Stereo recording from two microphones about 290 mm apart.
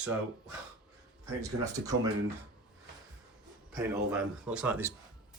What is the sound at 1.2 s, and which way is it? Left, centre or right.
Speech, centre.